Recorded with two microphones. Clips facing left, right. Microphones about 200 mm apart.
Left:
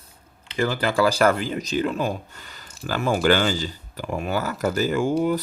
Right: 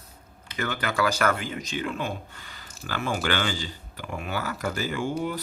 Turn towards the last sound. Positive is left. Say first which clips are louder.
# left 7 dB
turn(degrees=45)  # may be behind; listen again after turning